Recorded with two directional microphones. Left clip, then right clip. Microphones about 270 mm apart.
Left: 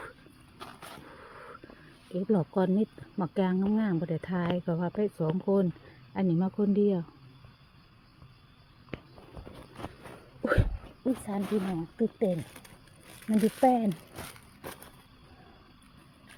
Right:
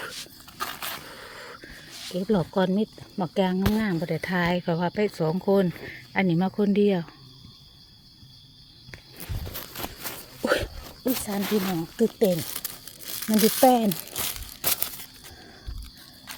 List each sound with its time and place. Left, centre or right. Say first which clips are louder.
0.6 s a sound: right 12 dB; centre
2.1 s speech: right 4 dB; centre
10.4 s a sound: right 5 dB; centre
11.3 s speech: right 5 dB; centre
11.9 s crumpling: right 7 dB; right
13.7 s speech: right 4 dB; centre